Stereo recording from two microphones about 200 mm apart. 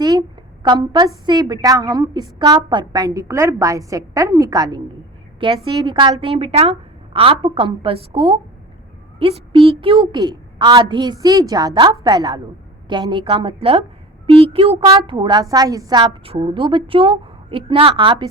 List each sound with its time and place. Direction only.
0.0 s a woman's voice: 20° right (ahead or behind)